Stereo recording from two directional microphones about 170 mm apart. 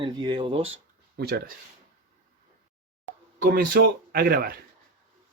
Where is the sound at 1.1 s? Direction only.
70° right (ahead or behind).